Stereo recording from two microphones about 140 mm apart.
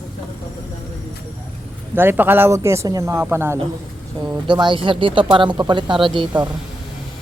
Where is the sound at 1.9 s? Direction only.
15° right (ahead or behind).